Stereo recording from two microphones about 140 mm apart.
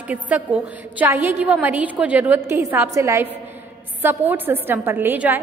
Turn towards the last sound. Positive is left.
turn(degrees=-15)  # may be behind; listen again after turning